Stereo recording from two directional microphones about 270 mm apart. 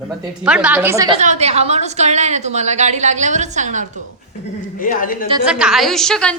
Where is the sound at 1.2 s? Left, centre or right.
Right.